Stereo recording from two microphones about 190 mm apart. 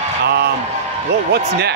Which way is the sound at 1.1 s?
60° right (ahead or behind).